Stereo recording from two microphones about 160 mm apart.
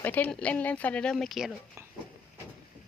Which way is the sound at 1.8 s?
15° right (ahead or behind).